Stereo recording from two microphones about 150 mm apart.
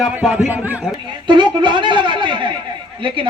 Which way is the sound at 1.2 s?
30° right (ahead or behind).